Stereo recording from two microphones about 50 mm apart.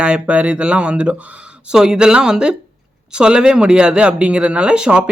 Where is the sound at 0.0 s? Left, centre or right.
Right.